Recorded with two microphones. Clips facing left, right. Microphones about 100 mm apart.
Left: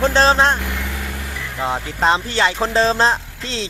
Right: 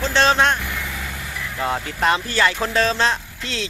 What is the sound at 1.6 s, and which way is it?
Speech, 20° left (ahead or behind).